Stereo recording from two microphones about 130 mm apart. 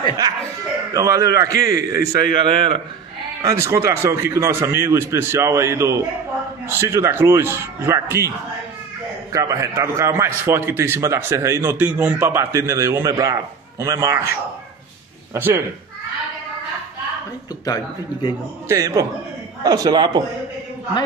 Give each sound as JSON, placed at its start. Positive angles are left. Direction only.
{"t": 0.9, "sound": "a man's voice", "side_deg": -25}
{"t": 2.3, "sound": "a man's voice", "side_deg": -40}
{"t": 3.4, "sound": "a man's voice", "side_deg": -20}
{"t": 9.3, "sound": "a man's voice", "side_deg": -25}
{"t": 11.7, "sound": "a man's voice", "side_deg": -10}
{"t": 15.3, "sound": "a man's voice", "side_deg": -20}
{"t": 17.6, "sound": "a man's voice", "side_deg": 30}
{"t": 18.7, "sound": "a man's voice", "side_deg": -25}